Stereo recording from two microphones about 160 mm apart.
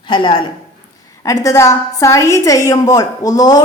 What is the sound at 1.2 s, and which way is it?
Speech, 20° left (ahead or behind).